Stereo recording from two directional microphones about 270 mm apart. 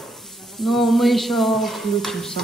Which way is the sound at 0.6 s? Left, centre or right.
Centre.